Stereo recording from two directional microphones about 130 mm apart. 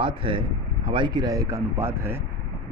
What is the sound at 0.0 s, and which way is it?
A man's voice, 40° right (ahead or behind).